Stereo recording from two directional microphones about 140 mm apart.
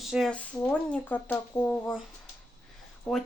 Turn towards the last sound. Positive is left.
turn(degrees=5)  # may be behind; listen again after turning